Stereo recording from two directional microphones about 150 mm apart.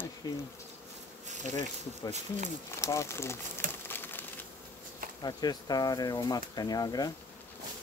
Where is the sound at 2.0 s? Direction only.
25° left (ahead or behind).